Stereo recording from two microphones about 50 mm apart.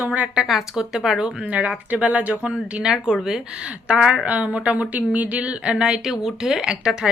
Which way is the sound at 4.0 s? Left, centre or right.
Centre.